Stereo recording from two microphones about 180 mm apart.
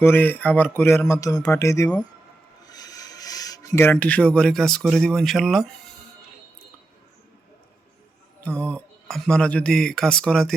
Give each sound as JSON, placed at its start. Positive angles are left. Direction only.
{"t": 0.0, "sound": "speech", "side_deg": 10}
{"t": 8.4, "sound": "speech", "side_deg": 5}